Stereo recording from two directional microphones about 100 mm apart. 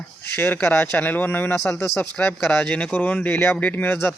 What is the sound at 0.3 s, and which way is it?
Speech, 20° left (ahead or behind).